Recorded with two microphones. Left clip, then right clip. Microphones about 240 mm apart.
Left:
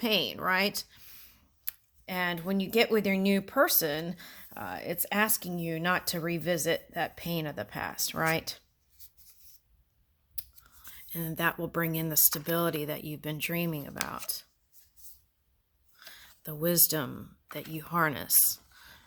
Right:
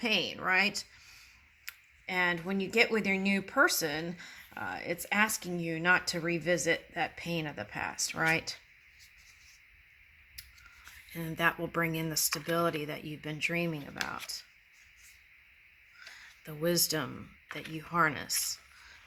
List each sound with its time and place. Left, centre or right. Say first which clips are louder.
0.0 s speech: left 2 dB; left
11.1 s speech: right 1 dB; left
16.0 s speech: left 2 dB; left